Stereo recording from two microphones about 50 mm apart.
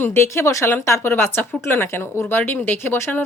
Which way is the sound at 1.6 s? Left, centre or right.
Left.